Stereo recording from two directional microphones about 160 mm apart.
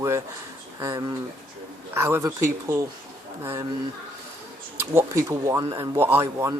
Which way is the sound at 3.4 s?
15° right (ahead or behind).